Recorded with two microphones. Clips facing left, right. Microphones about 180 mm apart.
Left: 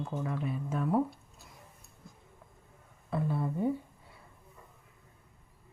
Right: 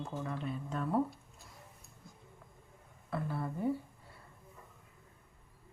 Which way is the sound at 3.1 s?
20° left (ahead or behind).